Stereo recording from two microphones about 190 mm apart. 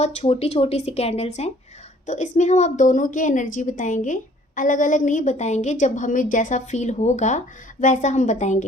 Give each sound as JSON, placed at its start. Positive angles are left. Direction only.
{"t": 0.0, "sound": "a woman's voice", "side_deg": 35}